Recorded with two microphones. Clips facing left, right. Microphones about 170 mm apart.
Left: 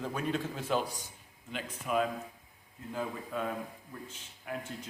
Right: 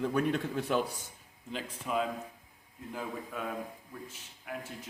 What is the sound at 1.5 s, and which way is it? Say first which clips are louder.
Speech: left 1 dB; 25° right (ahead or behind).